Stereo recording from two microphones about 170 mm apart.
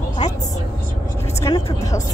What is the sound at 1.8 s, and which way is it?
Music, 20° left (ahead or behind).